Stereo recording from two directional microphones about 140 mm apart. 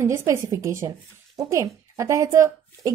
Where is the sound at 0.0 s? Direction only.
20° right (ahead or behind).